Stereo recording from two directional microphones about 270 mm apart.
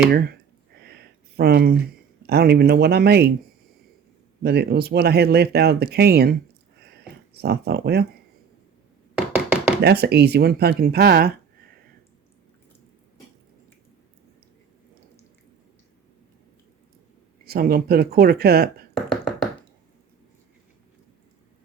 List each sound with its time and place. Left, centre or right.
0.1 s speech: right
0.8 s a sound: right
2.2 s speech: right
4.4 s speech: right
7.4 s speech: right
9.1 s knock: centre
9.8 s speech: right
17.4 s speech: right
19.1 s knock: centre